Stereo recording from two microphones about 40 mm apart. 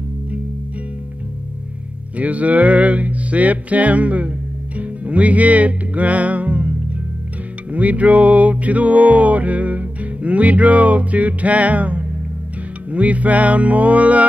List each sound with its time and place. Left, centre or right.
2.1 s music: right
7.7 s music: right